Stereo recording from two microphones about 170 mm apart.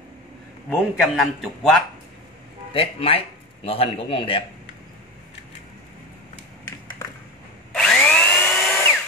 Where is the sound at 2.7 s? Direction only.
35° left (ahead or behind).